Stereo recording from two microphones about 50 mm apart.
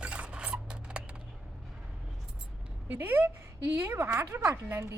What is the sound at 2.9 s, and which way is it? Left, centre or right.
A woman's voice, right.